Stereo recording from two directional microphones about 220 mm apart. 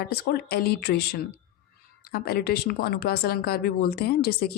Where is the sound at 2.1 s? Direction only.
45° left (ahead or behind).